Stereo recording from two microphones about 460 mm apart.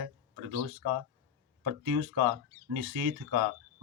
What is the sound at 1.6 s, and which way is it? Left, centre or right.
Speech, right.